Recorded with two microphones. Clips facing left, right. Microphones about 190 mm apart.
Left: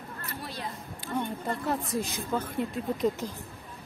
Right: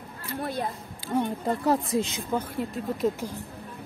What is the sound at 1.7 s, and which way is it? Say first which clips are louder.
Speech: right 7 dB; 25° right (ahead or behind).